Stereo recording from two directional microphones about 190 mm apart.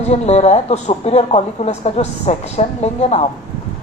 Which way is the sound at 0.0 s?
35° left (ahead or behind).